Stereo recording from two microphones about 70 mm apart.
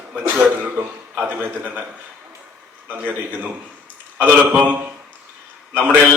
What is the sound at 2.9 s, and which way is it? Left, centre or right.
Speech, right.